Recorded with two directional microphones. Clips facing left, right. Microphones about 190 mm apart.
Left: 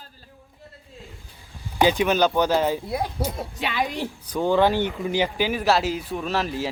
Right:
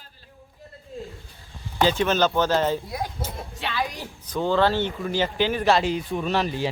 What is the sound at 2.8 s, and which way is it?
Speech, 30° left (ahead or behind).